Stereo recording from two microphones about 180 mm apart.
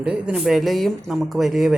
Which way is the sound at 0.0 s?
5° right (ahead or behind).